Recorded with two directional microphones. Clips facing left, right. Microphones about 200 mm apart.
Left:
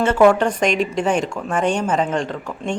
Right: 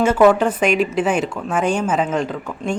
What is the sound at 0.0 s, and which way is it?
Speech, 5° right (ahead or behind).